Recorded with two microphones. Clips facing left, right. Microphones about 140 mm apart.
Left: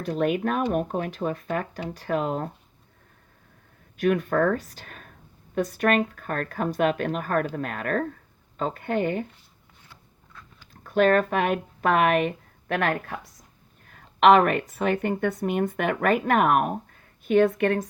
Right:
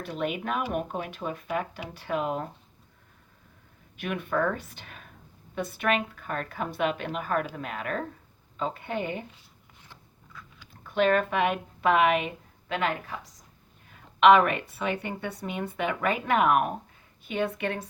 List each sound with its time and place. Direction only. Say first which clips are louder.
0.0 s speech: left 7 dB; 45° left (ahead or behind)
3.9 s speech: left 7 dB; 40° left (ahead or behind)
10.8 s speech: left 4 dB; 45° left (ahead or behind)
13.8 s a sound: left 1 dB; 45° left (ahead or behind)
14.7 s speech: left 6 dB; 45° left (ahead or behind)